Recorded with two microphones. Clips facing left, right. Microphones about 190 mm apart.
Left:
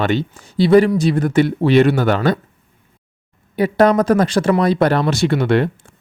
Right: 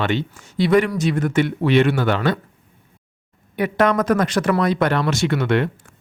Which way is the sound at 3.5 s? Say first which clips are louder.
Left 5 dB; 35° left (ahead or behind).